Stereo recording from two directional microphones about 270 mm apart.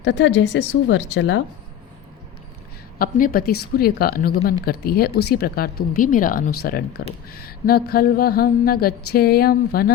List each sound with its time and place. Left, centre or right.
0.0 s a woman's voice: left
3.0 s speech: left